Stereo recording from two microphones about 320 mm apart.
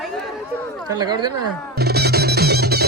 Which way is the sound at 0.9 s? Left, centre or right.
Centre.